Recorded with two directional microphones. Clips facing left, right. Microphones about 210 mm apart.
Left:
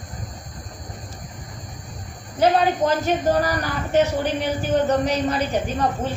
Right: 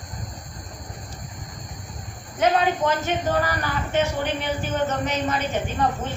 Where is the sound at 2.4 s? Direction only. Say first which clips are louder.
Left 2 dB; 40° left (ahead or behind).